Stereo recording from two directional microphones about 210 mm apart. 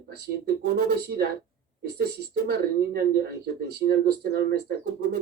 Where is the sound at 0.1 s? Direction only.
50° right (ahead or behind).